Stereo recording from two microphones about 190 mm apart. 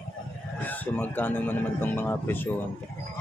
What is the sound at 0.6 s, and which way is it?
Speech, 10° left (ahead or behind).